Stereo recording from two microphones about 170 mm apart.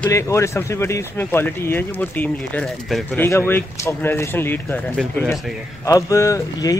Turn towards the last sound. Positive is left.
turn(degrees=20)  # may be behind; listen again after turning